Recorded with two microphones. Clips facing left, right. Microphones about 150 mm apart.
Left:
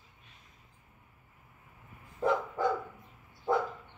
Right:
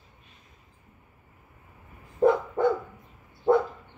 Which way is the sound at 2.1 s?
60° right (ahead or behind).